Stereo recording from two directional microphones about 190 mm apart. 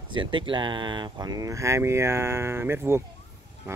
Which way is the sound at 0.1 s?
25° right (ahead or behind).